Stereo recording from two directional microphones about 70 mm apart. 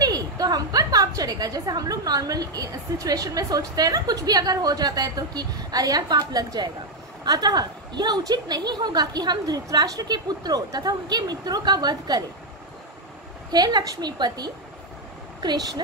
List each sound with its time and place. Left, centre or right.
0.0 s a woman's voice: right
13.5 s a woman's voice: right
15.4 s a woman's voice: right